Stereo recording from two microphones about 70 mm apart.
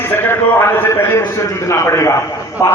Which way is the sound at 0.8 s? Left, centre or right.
Left.